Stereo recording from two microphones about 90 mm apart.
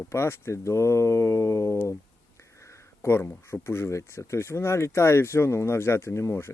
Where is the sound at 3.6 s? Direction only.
30° left (ahead or behind).